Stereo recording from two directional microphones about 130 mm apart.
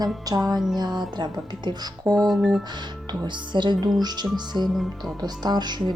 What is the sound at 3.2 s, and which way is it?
Speech, 35° right (ahead or behind).